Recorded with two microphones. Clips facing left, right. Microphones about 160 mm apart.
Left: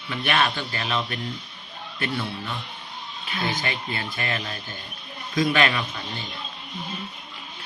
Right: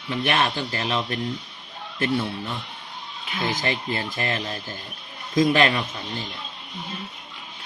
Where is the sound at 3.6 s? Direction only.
40° right (ahead or behind).